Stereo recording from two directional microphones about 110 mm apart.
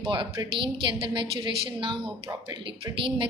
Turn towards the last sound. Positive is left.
turn(degrees=-50)  # may be behind; listen again after turning